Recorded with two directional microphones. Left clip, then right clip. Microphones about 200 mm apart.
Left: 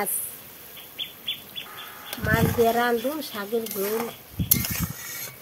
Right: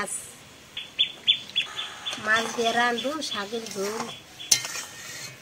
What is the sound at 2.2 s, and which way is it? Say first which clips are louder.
Speech: left 2 dB; 35° left (ahead or behind).